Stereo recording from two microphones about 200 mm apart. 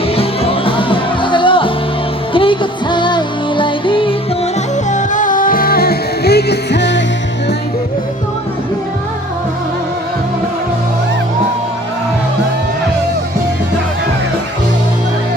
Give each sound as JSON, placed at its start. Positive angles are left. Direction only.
{"t": 0.2, "sound": "music", "side_deg": 30}
{"t": 4.9, "sound": "music", "side_deg": 40}